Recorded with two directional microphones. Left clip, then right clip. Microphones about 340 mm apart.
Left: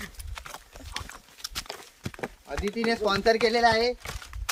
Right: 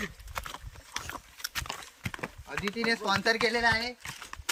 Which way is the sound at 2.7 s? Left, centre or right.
Centre.